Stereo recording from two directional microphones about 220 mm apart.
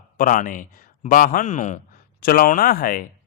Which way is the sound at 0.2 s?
35° left (ahead or behind).